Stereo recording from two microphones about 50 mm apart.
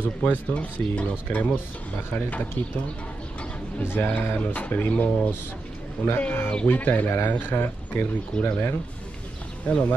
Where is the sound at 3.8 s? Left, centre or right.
Left.